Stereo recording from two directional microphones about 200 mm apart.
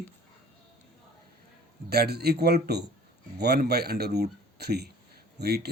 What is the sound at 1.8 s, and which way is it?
Speech, 55° right (ahead or behind).